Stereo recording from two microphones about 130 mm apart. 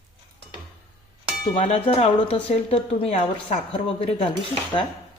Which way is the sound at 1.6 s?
50° left (ahead or behind).